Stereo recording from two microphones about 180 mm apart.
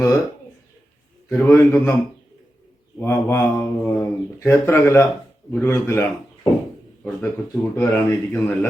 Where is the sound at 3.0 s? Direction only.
15° left (ahead or behind).